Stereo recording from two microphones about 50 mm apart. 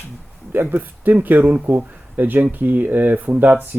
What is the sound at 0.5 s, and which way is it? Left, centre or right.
Speech, right.